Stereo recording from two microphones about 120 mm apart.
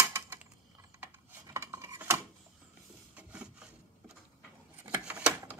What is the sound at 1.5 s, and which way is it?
Scissors, 25° right (ahead or behind).